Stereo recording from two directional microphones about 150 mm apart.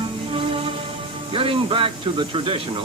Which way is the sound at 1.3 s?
35° right (ahead or behind).